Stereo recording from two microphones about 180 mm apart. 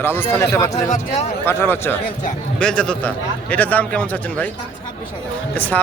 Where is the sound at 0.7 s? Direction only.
40° left (ahead or behind).